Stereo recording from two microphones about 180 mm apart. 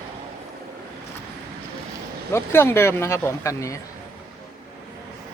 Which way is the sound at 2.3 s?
15° left (ahead or behind).